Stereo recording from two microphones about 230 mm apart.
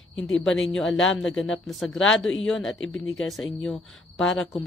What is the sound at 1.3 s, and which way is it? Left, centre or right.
A woman's voice, centre.